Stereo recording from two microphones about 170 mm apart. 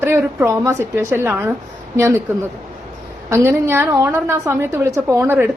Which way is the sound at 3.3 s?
15° right (ahead or behind).